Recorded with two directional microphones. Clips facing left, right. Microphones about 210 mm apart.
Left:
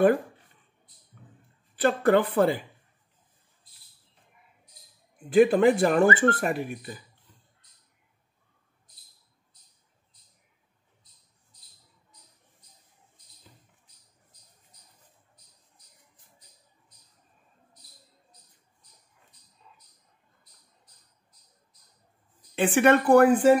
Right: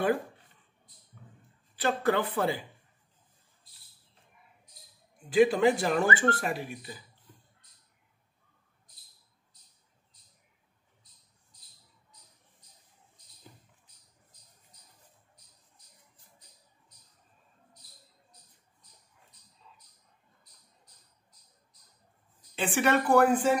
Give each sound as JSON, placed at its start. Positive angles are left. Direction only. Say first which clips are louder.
{"t": 1.8, "sound": "speech", "louder": "left 6 dB", "side_deg": 55}
{"t": 5.3, "sound": "speech", "louder": "left 4 dB", "side_deg": 55}
{"t": 22.6, "sound": "speech", "louder": "left 6 dB", "side_deg": 55}